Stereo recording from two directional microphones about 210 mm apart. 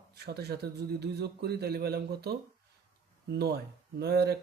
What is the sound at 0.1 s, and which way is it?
A man's voice, 50° right (ahead or behind).